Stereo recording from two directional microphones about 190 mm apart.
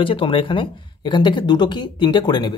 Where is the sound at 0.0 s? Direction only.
30° left (ahead or behind).